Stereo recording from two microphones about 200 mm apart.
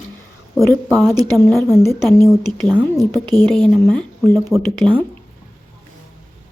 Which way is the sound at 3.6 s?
5° left (ahead or behind).